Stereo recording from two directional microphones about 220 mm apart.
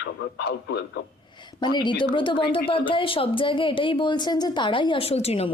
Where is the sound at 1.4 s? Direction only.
20° left (ahead or behind).